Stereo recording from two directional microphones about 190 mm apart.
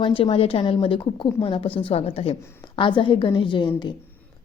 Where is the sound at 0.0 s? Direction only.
25° left (ahead or behind).